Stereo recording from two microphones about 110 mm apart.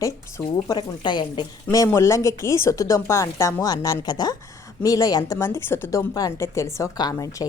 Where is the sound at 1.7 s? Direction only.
30° left (ahead or behind).